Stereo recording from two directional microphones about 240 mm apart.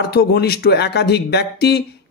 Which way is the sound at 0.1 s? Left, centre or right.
Left.